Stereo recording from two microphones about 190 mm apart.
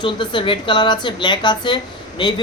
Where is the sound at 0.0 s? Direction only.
25° left (ahead or behind).